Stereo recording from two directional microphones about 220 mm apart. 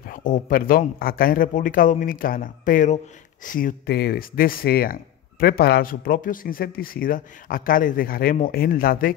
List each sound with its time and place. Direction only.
0.0 s speech: 35° left (ahead or behind)